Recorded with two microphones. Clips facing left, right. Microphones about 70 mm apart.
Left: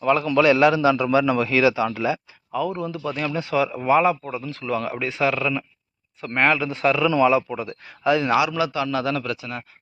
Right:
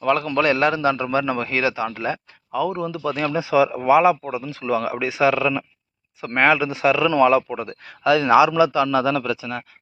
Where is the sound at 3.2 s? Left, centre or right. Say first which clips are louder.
Right 5 dB; right.